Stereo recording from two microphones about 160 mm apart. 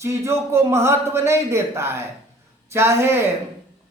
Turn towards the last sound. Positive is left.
turn(degrees=-15)  # may be behind; listen again after turning